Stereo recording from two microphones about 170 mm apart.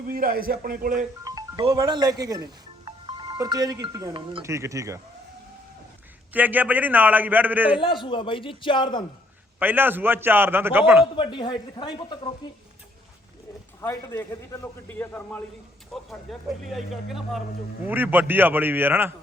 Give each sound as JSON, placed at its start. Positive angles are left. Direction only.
{"t": 0.1, "sound": "a man's voice", "side_deg": -60}
{"t": 1.2, "sound": "music", "side_deg": -20}
{"t": 1.6, "sound": "speech", "side_deg": -25}
{"t": 4.4, "sound": "a man's voice", "side_deg": -15}
{"t": 6.3, "sound": "a man's voice", "side_deg": -10}
{"t": 7.8, "sound": "speech", "side_deg": 30}
{"t": 9.6, "sound": "a man's voice", "side_deg": -10}
{"t": 11.0, "sound": "speech", "side_deg": 30}
{"t": 13.8, "sound": "a man's voice", "side_deg": 15}